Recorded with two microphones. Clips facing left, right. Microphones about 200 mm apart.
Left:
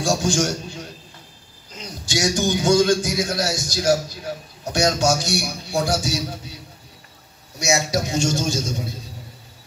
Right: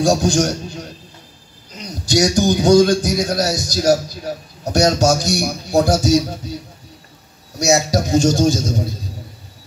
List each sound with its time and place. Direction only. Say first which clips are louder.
0.2 s speech: right 4 dB; 40° right (ahead or behind)
2.0 s speech: right 6 dB; 40° right (ahead or behind)
7.5 s speech: right 5 dB; 35° right (ahead or behind)